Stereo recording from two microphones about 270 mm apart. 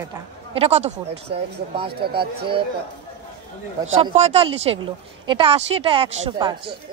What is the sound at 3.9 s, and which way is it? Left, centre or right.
Speech, right.